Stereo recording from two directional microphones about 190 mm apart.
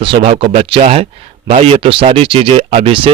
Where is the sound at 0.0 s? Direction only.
30° right (ahead or behind).